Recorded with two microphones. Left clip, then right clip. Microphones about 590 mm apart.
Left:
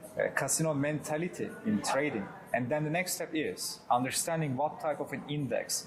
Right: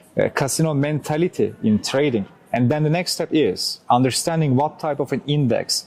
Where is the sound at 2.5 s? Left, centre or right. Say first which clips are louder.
Right 10 dB; right.